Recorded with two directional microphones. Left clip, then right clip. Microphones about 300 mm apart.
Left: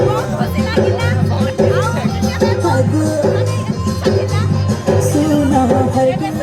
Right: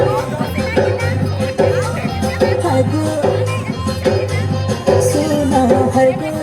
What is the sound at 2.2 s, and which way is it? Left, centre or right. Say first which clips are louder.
Music: right 1 dB; right.